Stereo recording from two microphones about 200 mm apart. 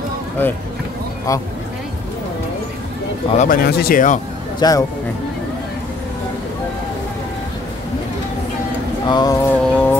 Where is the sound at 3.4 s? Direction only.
50° left (ahead or behind).